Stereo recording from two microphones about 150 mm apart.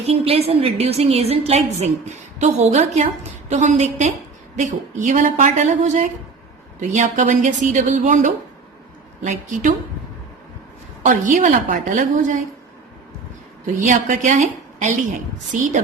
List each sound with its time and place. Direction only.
0.1 s a woman's voice: 40° right (ahead or behind)
11.0 s a woman's voice: 60° right (ahead or behind)
13.8 s a woman's voice: 55° right (ahead or behind)